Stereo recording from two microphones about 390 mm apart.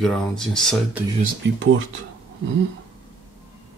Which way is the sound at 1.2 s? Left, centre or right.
Right.